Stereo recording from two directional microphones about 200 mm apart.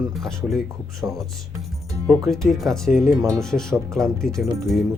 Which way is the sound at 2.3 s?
Centre (ahead or behind).